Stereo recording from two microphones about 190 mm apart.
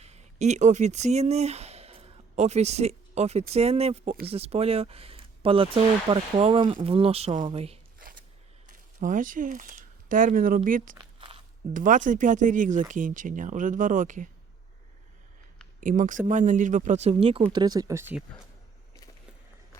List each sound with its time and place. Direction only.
0.0 s speech: 35° right (ahead or behind)
7.9 s a sound: 45° right (ahead or behind)
9.0 s speech: 45° right (ahead or behind)
10.9 s a sound: 25° right (ahead or behind)
11.7 s speech: 45° right (ahead or behind)
15.8 s speech: 45° right (ahead or behind); by 18.2 s 15° right (ahead or behind)